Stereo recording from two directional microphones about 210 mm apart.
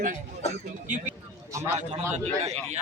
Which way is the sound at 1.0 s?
15° right (ahead or behind).